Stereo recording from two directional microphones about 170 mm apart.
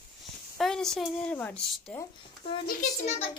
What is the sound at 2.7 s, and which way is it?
Speech, 45° left (ahead or behind).